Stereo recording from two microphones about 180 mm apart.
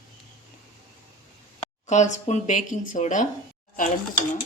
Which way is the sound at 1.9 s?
40° left (ahead or behind).